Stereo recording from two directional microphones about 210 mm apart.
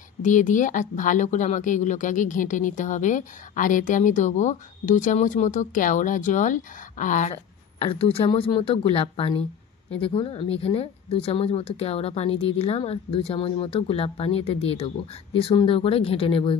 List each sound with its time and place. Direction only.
0.2 s speech: 35° left (ahead or behind)
7.8 s speech: 25° left (ahead or behind)